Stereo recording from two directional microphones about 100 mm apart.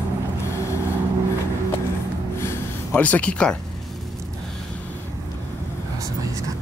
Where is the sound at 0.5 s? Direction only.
30° left (ahead or behind).